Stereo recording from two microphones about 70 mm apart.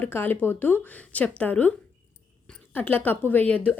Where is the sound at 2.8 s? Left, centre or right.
Left.